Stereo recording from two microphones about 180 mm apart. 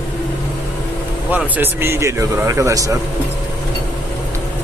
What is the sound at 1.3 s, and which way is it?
Speech, 10° right (ahead or behind).